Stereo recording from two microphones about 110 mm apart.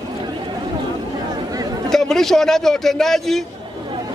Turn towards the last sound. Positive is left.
turn(degrees=0)  # may be behind; listen again after turning